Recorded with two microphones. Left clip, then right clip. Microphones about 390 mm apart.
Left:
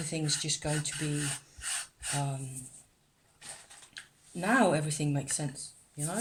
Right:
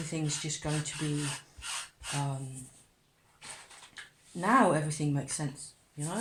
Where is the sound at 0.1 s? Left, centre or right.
Left.